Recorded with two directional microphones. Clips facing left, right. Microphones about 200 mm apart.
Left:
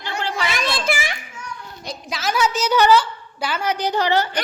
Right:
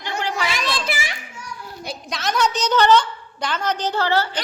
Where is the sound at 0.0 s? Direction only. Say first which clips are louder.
Right 1 dB; 15° right (ahead or behind).